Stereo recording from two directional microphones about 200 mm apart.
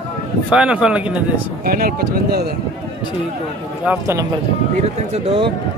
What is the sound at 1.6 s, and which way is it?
Speech, 45° right (ahead or behind).